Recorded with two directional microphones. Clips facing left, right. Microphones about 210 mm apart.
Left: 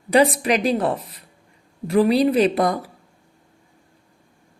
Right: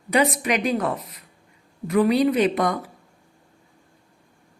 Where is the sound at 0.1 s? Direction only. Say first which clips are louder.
Left 4 dB; 35° left (ahead or behind).